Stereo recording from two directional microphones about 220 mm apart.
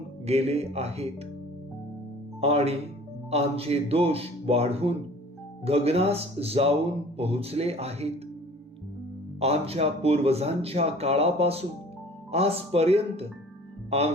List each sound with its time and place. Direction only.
0.3 s speech: 30° right (ahead or behind)
2.4 s speech: 25° right (ahead or behind)
9.4 s speech: 30° right (ahead or behind)